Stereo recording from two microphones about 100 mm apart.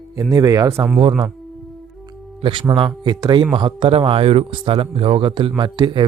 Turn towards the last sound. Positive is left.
turn(degrees=-50)  # may be behind; listen again after turning